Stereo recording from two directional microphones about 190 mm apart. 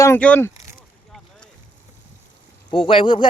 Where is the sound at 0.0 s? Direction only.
10° left (ahead or behind).